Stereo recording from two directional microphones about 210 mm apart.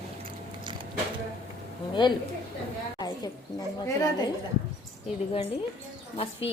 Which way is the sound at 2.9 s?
20° left (ahead or behind).